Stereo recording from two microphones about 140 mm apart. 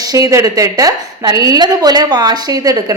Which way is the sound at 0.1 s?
25° right (ahead or behind).